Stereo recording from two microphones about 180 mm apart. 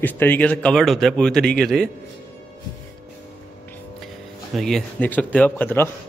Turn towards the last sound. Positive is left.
turn(degrees=10)  # may be behind; listen again after turning